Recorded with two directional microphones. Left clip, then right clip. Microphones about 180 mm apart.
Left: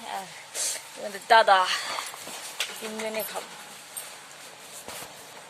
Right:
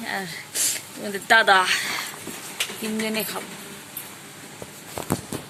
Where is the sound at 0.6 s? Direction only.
25° left (ahead or behind).